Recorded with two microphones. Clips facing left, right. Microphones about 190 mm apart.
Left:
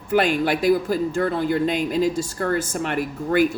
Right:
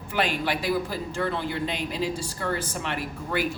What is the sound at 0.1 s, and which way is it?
Speech, 45° left (ahead or behind).